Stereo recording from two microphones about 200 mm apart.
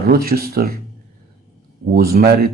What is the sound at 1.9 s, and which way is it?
Speech, 50° right (ahead or behind).